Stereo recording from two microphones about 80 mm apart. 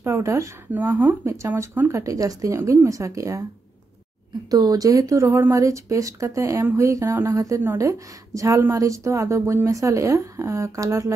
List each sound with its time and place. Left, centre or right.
0.0 s speech: right
0.8 s speech: right
1.2 s speech: right
4.5 s speech: right